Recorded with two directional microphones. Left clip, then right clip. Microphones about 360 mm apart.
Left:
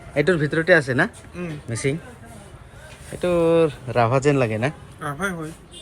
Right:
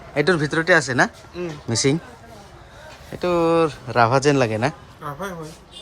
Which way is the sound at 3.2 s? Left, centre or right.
Centre.